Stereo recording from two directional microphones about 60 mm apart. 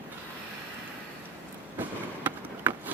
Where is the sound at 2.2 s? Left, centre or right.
Right.